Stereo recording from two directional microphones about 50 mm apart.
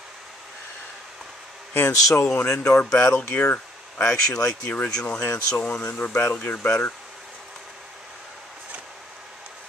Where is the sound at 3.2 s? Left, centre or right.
Left.